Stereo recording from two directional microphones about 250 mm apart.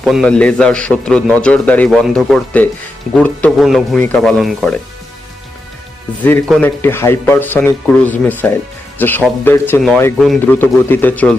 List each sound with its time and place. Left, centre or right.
0.0 s a man's voice: centre
6.2 s speech: centre